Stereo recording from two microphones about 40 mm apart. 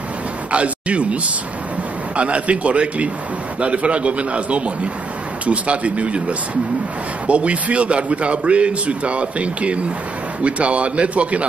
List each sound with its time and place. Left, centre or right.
0.5 s a man's voice: right